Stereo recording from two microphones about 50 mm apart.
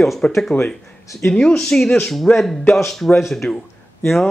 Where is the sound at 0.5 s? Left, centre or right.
Left.